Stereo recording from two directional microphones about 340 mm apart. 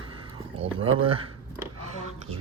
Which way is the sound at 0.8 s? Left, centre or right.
Centre.